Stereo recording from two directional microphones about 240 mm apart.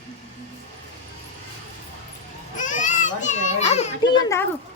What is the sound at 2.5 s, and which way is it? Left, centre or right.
Children playing, left.